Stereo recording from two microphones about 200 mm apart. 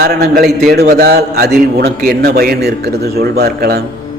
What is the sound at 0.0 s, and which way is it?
A man's voice, 50° right (ahead or behind).